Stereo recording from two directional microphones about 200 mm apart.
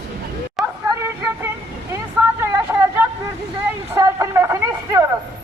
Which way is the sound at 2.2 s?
10° right (ahead or behind).